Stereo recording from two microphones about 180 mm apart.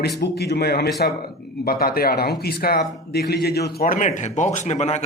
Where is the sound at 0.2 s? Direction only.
65° left (ahead or behind).